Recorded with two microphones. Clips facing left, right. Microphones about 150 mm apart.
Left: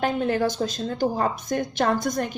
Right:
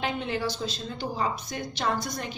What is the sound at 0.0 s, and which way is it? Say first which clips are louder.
A woman's voice: left 7 dB; 45° left (ahead or behind).